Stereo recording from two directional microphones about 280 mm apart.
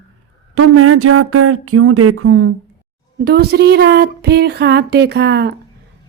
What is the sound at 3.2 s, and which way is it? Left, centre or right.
A child's voice, right.